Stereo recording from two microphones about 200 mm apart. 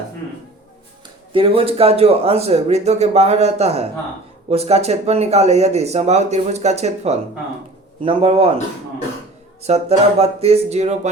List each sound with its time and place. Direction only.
1.3 s speech: 25° right (ahead or behind)
9.6 s speech: 30° right (ahead or behind)